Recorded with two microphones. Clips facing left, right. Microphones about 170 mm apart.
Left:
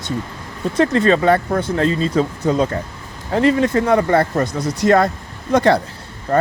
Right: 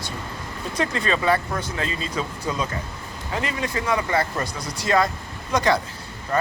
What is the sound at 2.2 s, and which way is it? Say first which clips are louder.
Speech: left 9 dB; 65° left (ahead or behind).